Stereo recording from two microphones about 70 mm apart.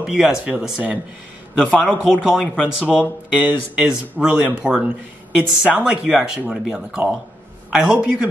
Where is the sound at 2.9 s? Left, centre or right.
Right.